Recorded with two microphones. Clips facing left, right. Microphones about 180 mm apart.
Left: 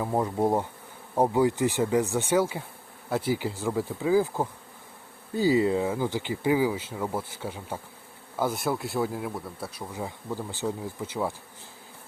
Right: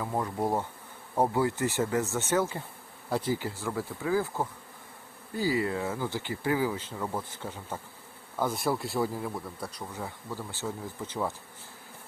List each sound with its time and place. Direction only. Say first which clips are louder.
0.0 s bee: left 5 dB; 25° left (ahead or behind)
1.1 s speech: left 4 dB; 15° left (ahead or behind)
9.9 s speech: left 4 dB; 15° left (ahead or behind)